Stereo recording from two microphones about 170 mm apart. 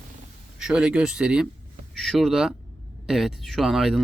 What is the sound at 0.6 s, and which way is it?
Speech, 5° right (ahead or behind).